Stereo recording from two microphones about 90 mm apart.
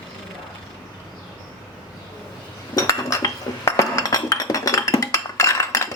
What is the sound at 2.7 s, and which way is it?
Chink, 35° left (ahead or behind).